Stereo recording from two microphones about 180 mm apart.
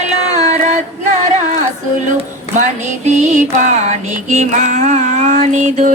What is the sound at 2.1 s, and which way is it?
Mantra, 40° right (ahead or behind).